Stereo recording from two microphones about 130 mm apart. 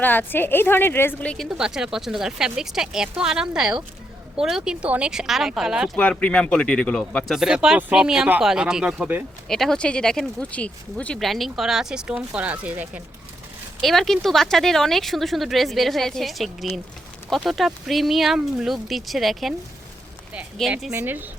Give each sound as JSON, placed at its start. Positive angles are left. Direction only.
{"t": 0.0, "sound": "a woman's voice", "side_deg": 15}
{"t": 1.5, "sound": "speech", "side_deg": -5}
{"t": 6.0, "sound": "speech", "side_deg": 5}
{"t": 7.3, "sound": "speech", "side_deg": -5}
{"t": 9.5, "sound": "speech", "side_deg": 5}
{"t": 13.8, "sound": "speech", "side_deg": 0}
{"t": 20.9, "sound": "speech", "side_deg": -15}